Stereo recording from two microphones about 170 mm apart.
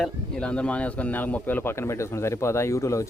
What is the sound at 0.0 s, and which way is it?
Speech, 5° left (ahead or behind).